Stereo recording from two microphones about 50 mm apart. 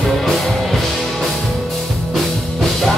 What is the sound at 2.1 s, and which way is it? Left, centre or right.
Music, centre.